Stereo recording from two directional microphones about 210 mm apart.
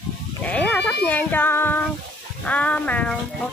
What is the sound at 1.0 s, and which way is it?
Speech, 10° left (ahead or behind).